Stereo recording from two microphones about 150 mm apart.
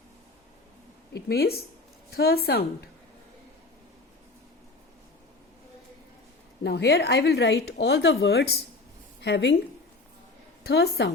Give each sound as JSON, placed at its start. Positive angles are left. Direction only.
{"t": 1.3, "sound": "speech", "side_deg": 90}
{"t": 6.7, "sound": "speech", "side_deg": 90}
{"t": 10.6, "sound": "a woman's voice", "side_deg": 90}